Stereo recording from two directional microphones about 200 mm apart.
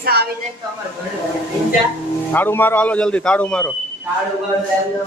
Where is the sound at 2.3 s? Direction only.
10° left (ahead or behind).